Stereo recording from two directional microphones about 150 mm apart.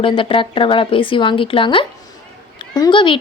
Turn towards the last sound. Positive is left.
turn(degrees=35)  # may be behind; listen again after turning